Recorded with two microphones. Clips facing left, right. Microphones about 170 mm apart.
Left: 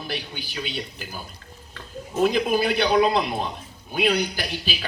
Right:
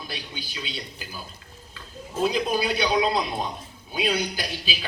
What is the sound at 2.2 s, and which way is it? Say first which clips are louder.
Speech: left 3 dB; 50° left (ahead or behind).